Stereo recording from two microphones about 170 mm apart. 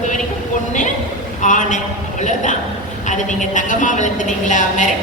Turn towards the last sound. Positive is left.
turn(degrees=45)  # may be behind; listen again after turning